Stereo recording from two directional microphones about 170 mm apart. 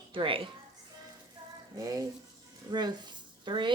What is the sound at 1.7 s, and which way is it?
A woman's voice, 20° right (ahead or behind).